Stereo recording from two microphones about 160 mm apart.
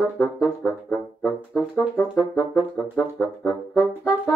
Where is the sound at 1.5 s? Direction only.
5° right (ahead or behind).